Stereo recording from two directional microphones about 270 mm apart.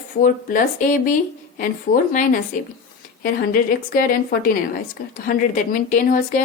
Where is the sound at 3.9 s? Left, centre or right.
Left.